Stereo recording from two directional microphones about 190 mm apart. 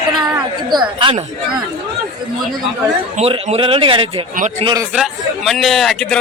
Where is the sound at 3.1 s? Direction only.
30° right (ahead or behind).